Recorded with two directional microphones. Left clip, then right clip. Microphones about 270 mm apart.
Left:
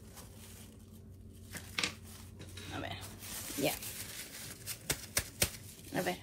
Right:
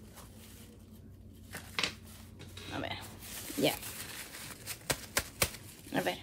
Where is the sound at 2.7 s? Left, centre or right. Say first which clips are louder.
Right 4 dB; right.